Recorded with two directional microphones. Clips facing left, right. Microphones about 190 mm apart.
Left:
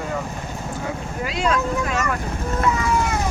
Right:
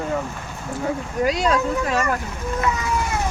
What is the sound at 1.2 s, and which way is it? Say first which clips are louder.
Speech: right 2 dB; 40° right (ahead or behind).